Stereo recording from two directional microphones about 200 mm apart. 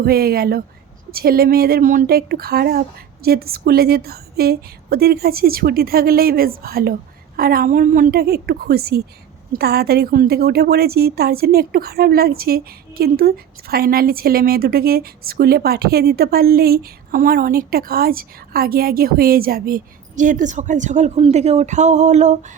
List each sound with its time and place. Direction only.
0.0 s a woman's voice: 50° right (ahead or behind)